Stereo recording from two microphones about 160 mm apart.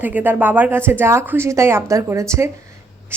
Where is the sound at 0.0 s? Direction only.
10° right (ahead or behind).